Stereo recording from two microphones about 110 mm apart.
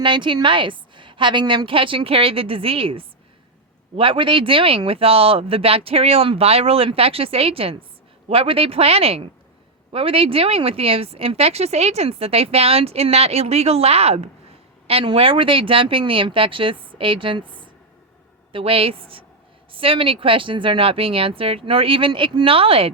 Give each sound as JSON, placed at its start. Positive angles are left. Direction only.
{"t": 0.0, "sound": "a woman's voice", "side_deg": -45}
{"t": 14.8, "sound": "a woman's voice", "side_deg": -60}
{"t": 18.5, "sound": "speech", "side_deg": -60}